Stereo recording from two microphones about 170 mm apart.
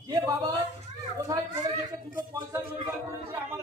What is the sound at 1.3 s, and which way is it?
Speech, 20° right (ahead or behind).